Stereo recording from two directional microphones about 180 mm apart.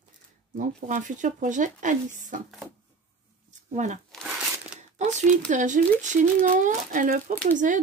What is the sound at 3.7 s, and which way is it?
Speech, 45° right (ahead or behind).